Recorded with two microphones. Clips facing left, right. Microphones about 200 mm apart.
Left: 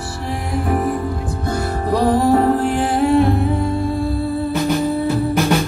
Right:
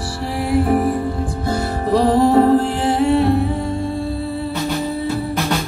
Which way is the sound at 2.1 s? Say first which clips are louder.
Right 3 dB; 25° right (ahead or behind).